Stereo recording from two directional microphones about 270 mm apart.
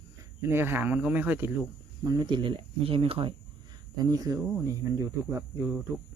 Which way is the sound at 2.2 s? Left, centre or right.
Centre.